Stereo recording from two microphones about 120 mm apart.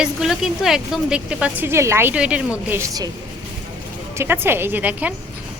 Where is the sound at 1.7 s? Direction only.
20° right (ahead or behind).